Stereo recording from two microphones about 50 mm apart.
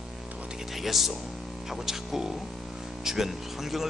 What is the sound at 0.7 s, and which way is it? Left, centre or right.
Speech, centre.